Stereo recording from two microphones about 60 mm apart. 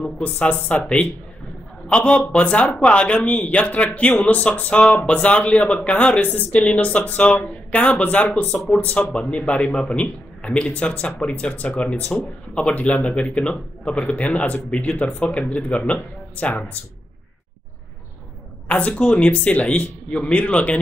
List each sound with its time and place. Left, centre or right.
0.0 s speech: centre
18.7 s speech: centre